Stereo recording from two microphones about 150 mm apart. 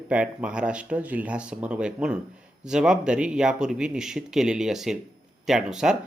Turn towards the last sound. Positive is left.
turn(degrees=-5)  # may be behind; listen again after turning